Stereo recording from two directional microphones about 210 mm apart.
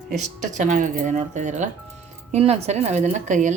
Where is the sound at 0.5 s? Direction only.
40° right (ahead or behind).